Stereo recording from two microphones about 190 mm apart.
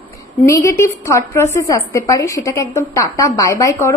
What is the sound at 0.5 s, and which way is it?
A woman's voice, 15° left (ahead or behind).